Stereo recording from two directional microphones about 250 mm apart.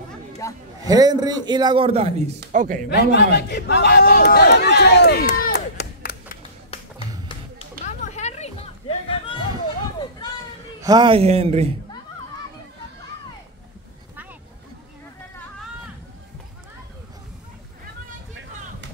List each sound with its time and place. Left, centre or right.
0.4 s a man's voice: centre
0.8 s a man's voice: centre
2.3 s speech: right
2.9 s a man's voice: left
7.8 s a sound: left
10.8 s a man's voice: centre